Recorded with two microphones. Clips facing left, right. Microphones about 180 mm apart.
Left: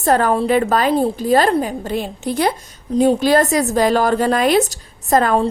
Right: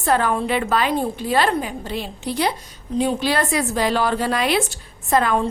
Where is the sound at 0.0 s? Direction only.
40° left (ahead or behind).